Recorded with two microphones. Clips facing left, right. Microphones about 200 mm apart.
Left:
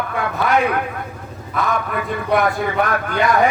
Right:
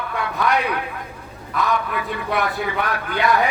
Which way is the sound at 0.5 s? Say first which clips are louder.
Left 5 dB; 50° left (ahead or behind).